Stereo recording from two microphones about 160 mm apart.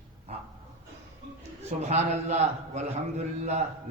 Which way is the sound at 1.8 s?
45° right (ahead or behind).